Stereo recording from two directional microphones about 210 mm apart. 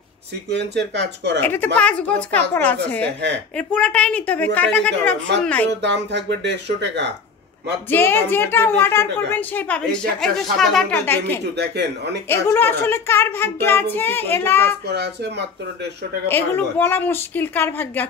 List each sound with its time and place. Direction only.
0.5 s speech: 55° right (ahead or behind)
1.4 s a woman's voice: 10° left (ahead or behind)
5.8 s speech: 55° right (ahead or behind)
7.9 s a woman's voice: 10° left (ahead or behind)
11.5 s speech: 55° right (ahead or behind)
12.3 s a woman's voice: 10° left (ahead or behind)
14.9 s speech: 50° right (ahead or behind)
16.3 s a woman's voice: 10° left (ahead or behind)